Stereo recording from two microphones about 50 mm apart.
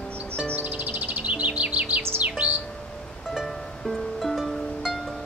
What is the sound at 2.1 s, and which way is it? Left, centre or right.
Bird, right.